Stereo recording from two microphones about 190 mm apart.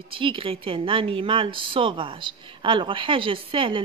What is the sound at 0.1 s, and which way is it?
A woman's voice, 30° right (ahead or behind).